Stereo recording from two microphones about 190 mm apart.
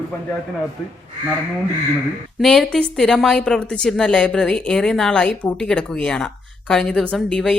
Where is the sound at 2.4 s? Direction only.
Centre (ahead or behind).